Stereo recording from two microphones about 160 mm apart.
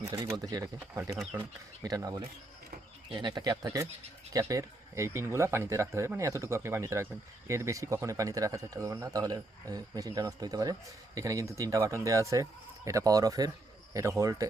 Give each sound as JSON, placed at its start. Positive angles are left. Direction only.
{"t": 0.0, "sound": "speech", "side_deg": -20}